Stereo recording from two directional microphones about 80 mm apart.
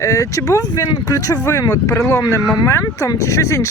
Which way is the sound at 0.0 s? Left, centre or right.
Left.